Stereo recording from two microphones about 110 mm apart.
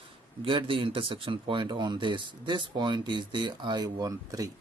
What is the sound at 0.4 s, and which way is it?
Speech, 50° right (ahead or behind).